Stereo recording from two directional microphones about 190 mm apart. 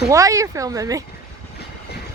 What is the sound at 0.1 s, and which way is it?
Speech, 15° right (ahead or behind).